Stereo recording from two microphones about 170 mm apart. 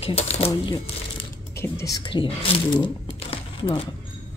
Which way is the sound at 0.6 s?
25° left (ahead or behind).